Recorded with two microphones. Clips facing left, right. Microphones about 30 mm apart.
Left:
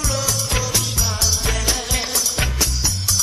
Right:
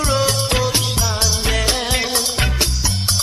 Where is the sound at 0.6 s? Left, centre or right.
Right.